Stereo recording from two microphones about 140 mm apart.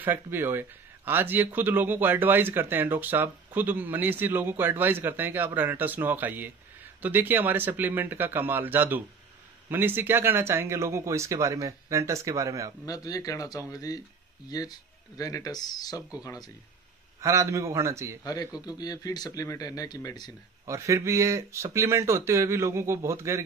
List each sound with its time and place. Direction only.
0.0 s speech: 15° right (ahead or behind)
12.8 s speech: 25° left (ahead or behind)
17.2 s speech: 20° right (ahead or behind)
18.2 s speech: 25° left (ahead or behind)
20.6 s speech: 20° right (ahead or behind)